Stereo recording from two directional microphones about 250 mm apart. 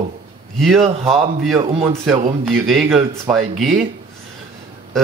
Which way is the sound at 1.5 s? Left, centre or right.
Centre.